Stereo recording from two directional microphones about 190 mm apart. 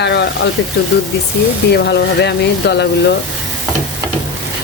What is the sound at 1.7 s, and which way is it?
Speech, 60° left (ahead or behind).